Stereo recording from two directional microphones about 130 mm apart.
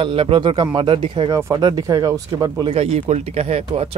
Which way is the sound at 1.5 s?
30° right (ahead or behind).